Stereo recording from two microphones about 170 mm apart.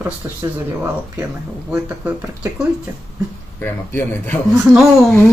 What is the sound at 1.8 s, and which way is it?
Speech, 10° right (ahead or behind).